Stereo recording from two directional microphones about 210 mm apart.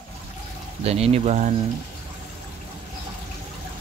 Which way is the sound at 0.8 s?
30° right (ahead or behind).